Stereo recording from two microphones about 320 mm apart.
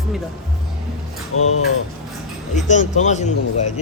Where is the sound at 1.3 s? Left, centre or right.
Left.